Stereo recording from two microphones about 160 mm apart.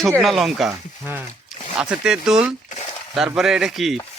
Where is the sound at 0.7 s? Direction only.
15° right (ahead or behind).